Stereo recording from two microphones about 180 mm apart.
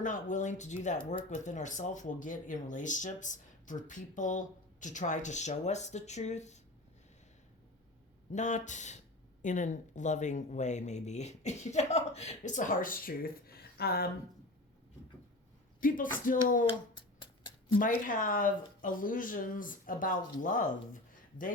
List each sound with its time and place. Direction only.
0.0 s speech: 45° left (ahead or behind)
8.3 s speech: 40° left (ahead or behind); by 14.1 s 60° left (ahead or behind)
15.8 s speech: 50° left (ahead or behind)
16.6 s a sound: 25° left (ahead or behind)
17.7 s speech: 50° left (ahead or behind)